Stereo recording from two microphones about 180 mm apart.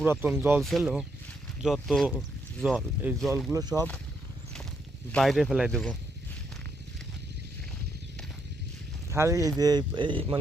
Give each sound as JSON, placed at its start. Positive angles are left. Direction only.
{"t": 0.0, "sound": "speech", "side_deg": -10}
{"t": 3.5, "sound": "speech", "side_deg": -20}
{"t": 5.1, "sound": "speech", "side_deg": 0}
{"t": 9.0, "sound": "speech", "side_deg": -15}